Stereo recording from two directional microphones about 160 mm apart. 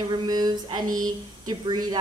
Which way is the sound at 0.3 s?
25° right (ahead or behind).